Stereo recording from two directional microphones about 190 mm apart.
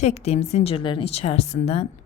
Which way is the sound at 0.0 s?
35° left (ahead or behind).